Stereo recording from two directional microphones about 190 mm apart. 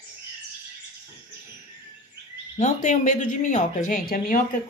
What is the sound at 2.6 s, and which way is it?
Speech, 40° left (ahead or behind).